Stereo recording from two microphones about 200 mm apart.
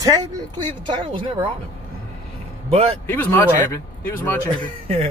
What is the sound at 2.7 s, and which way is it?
Speech, 30° right (ahead or behind).